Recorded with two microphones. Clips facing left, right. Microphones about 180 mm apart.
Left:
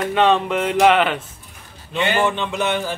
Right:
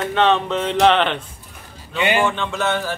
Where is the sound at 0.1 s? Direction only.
10° left (ahead or behind).